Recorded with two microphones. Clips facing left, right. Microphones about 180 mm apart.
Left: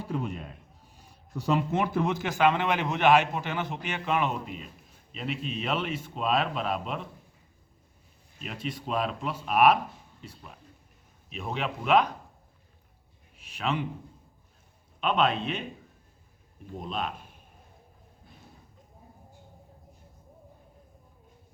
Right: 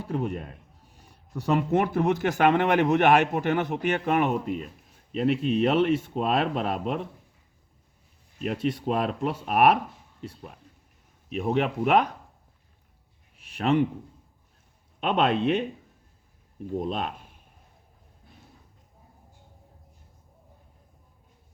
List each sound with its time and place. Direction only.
0.0 s speech: 55° right (ahead or behind)
8.4 s speech: 60° right (ahead or behind)
13.4 s a sound: 60° right (ahead or behind)
15.0 s speech: 60° right (ahead or behind)
16.9 s speech: 60° right (ahead or behind)